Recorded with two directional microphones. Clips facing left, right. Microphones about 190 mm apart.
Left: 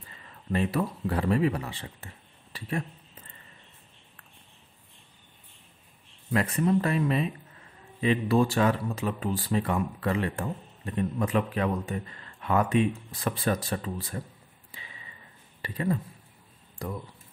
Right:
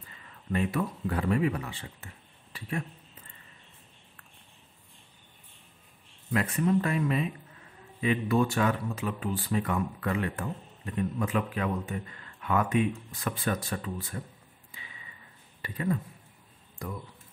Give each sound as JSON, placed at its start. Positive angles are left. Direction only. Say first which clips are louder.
{"t": 0.5, "sound": "speech", "louder": "left 2 dB", "side_deg": 35}
{"t": 6.3, "sound": "speech", "louder": "left 2 dB", "side_deg": 35}
{"t": 15.6, "sound": "speech", "louder": "left 2 dB", "side_deg": 35}